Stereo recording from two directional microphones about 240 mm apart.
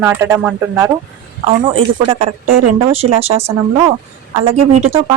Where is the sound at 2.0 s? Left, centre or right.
Right.